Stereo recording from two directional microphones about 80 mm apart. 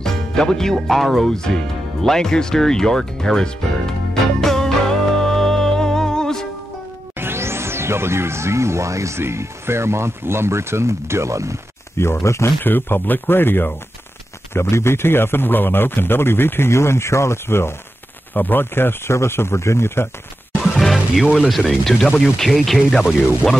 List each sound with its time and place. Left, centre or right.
0.0 s speech: centre
2.0 s music: centre
7.2 s speech: right
12.0 s a man's voice: left
12.6 s a man's voice: left
20.7 s music: centre
21.5 s speech: centre